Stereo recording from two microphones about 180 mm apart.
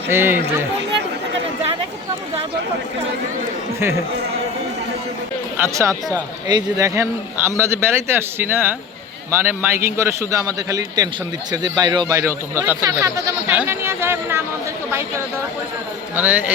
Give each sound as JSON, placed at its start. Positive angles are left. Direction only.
{"t": 0.1, "sound": "a man's voice", "side_deg": -15}
{"t": 5.5, "sound": "a man's voice", "side_deg": -15}
{"t": 16.1, "sound": "a man's voice", "side_deg": -10}